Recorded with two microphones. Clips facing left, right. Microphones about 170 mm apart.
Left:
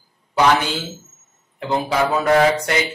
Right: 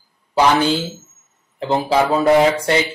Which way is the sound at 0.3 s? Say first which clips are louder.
Right 2 dB; 30° right (ahead or behind).